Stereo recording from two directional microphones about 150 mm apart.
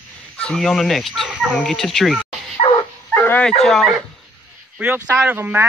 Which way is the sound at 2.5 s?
40° left (ahead or behind).